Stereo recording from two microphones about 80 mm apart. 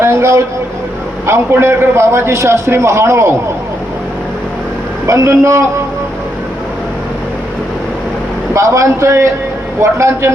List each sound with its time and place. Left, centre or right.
0.0 s vehicle: right
1.3 s a man's voice: right
5.0 s a man's voice: right
8.5 s a man's voice: right